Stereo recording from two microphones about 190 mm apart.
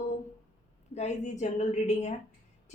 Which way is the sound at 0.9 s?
40° left (ahead or behind).